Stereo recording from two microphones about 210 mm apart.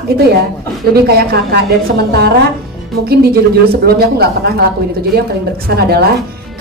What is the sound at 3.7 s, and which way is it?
A woman's voice, 50° right (ahead or behind).